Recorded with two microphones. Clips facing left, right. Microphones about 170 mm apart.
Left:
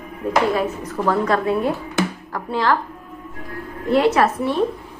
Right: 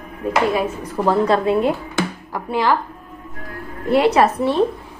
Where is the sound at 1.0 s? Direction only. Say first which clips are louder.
Right 3 dB; 25° right (ahead or behind).